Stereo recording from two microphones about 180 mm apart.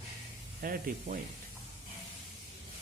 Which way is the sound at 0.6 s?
55° right (ahead or behind).